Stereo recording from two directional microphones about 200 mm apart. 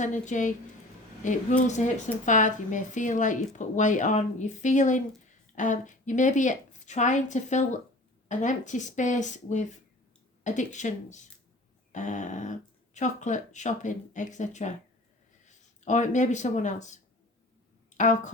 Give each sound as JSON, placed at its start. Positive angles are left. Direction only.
{"t": 0.0, "sound": "speech", "side_deg": 40}